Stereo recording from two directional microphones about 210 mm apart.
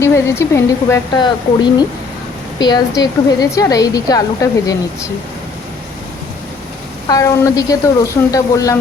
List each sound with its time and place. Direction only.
0.0 s a woman's voice: 15° left (ahead or behind)
7.1 s a woman's voice: 15° left (ahead or behind)